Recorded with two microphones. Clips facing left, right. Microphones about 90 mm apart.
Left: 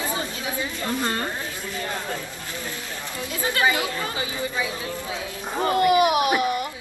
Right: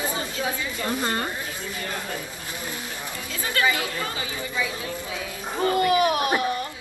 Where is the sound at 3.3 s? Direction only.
25° left (ahead or behind).